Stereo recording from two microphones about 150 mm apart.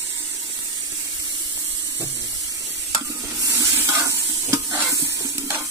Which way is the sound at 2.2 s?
25° right (ahead or behind).